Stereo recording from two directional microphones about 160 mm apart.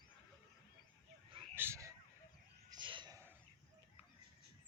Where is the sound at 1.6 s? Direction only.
15° right (ahead or behind).